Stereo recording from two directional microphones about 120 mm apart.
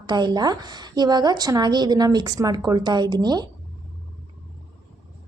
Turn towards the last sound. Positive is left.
turn(degrees=-35)  # may be behind; listen again after turning